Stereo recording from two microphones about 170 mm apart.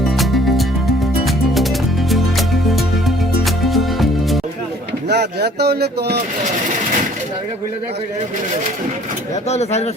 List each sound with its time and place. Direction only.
0.0 s music: centre (ahead or behind)
2.0 s music: centre (ahead or behind)
5.0 s speech: 75° right (ahead or behind)
9.5 s speech: 40° left (ahead or behind)